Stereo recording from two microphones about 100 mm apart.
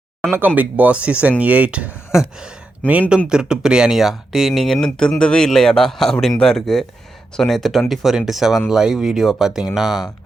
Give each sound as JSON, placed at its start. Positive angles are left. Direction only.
{"t": 0.2, "sound": "speech", "side_deg": -20}